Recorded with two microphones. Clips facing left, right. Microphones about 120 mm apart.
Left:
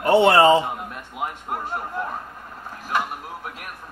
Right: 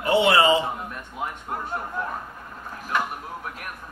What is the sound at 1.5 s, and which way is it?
Speech, 15° left (ahead or behind).